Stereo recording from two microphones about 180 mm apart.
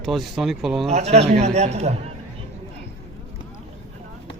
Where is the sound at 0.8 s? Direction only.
35° right (ahead or behind).